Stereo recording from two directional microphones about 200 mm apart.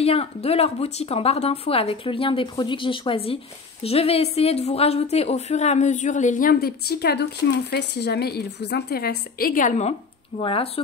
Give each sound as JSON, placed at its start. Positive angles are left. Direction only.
{"t": 0.0, "sound": "a woman's voice", "side_deg": 30}